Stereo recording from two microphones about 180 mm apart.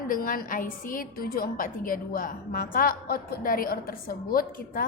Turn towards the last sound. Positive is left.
turn(degrees=50)  # may be behind; listen again after turning